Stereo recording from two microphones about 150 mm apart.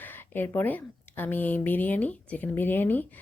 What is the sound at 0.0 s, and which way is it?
Speech, 15° left (ahead or behind).